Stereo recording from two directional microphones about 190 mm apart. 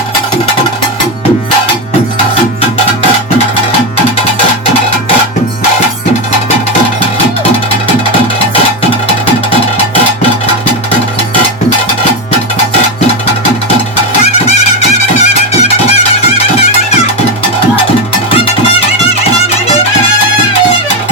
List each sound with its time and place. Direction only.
15.2 s music: 35° left (ahead or behind)